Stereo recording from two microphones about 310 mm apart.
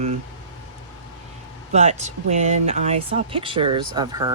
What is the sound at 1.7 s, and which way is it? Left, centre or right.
Speech, right.